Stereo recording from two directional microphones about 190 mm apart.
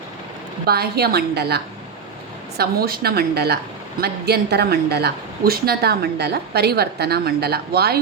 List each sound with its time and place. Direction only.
0.6 s a woman's voice: 55° right (ahead or behind)